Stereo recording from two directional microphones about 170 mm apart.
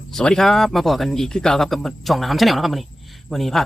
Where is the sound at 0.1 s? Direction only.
5° left (ahead or behind).